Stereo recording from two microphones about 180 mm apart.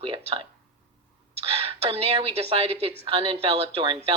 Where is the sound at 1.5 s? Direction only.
30° right (ahead or behind).